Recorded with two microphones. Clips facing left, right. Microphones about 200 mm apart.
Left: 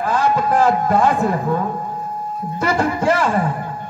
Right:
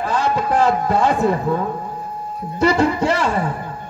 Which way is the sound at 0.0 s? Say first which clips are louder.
Left 2 dB; 50° left (ahead or behind).